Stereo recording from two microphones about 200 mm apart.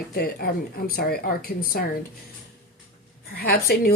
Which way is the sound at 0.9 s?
50° left (ahead or behind).